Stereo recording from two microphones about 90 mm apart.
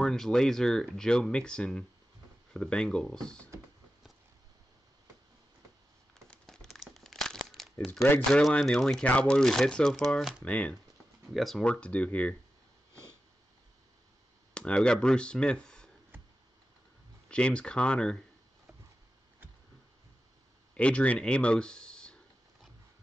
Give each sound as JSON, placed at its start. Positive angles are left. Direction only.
{"t": 0.0, "sound": "speech", "side_deg": 5}
{"t": 6.1, "sound": "crumpling", "side_deg": 5}
{"t": 7.8, "sound": "speech", "side_deg": 5}
{"t": 10.4, "sound": "speech", "side_deg": 15}
{"t": 11.3, "sound": "speech", "side_deg": 0}
{"t": 11.6, "sound": "speech", "side_deg": 10}
{"t": 14.5, "sound": "speech", "side_deg": 10}
{"t": 17.3, "sound": "speech", "side_deg": 10}
{"t": 20.7, "sound": "speech", "side_deg": 15}